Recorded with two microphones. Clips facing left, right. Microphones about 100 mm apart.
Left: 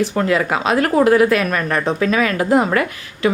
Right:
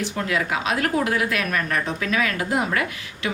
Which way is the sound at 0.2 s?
45° left (ahead or behind).